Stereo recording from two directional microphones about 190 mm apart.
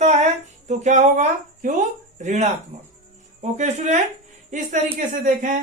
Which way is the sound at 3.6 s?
40° right (ahead or behind).